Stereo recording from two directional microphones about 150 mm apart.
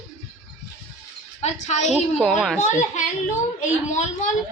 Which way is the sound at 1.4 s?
50° left (ahead or behind).